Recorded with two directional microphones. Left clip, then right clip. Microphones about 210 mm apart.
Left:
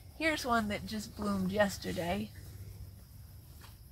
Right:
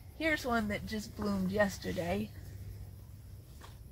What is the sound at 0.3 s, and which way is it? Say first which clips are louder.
A woman's voice: left 1 dB; 10° right (ahead or behind).